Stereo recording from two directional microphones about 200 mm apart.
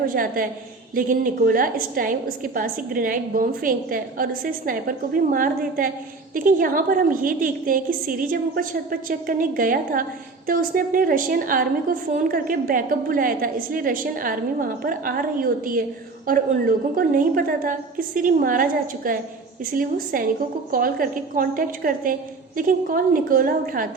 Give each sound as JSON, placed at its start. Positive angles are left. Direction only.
{"t": 0.1, "sound": "a woman's voice", "side_deg": -45}